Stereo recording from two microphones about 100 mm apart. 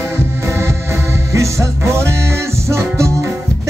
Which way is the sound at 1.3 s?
30° right (ahead or behind).